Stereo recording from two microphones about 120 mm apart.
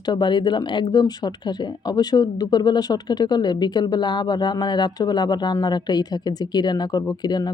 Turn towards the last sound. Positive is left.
turn(degrees=35)  # may be behind; listen again after turning